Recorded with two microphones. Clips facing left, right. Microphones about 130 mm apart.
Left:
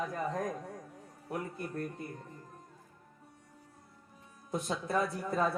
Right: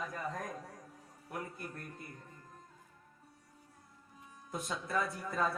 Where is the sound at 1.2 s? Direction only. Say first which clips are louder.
Left 5 dB; 30° left (ahead or behind).